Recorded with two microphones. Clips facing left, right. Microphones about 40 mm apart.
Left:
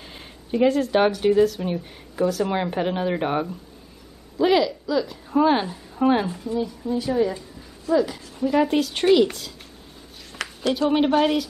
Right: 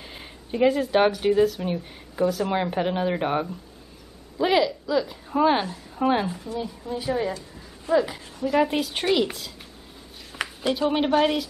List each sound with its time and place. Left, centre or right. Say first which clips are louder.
0.0 s a woman's voice: even; centre
8.5 s speech: left 2 dB; centre
10.3 s a sound: left 1 dB; centre
10.7 s speech: left 2 dB; centre